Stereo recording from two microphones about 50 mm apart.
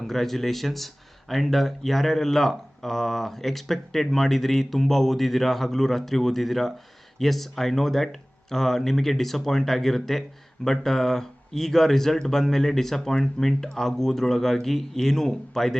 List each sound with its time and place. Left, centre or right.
0.0 s speech: centre